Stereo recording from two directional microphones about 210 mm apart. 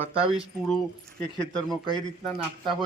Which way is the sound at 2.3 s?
Centre (ahead or behind).